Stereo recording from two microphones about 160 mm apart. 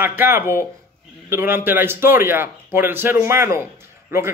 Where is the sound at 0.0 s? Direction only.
15° right (ahead or behind).